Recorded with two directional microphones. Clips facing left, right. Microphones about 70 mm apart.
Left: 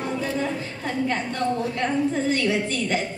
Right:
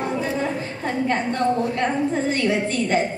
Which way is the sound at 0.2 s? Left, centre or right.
Right.